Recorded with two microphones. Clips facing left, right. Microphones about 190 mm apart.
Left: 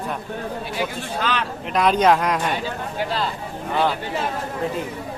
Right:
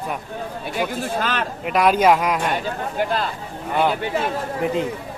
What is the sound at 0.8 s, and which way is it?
Speech, 45° right (ahead or behind).